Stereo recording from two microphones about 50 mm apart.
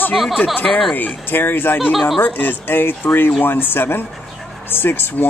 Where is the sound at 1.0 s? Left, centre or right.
Left.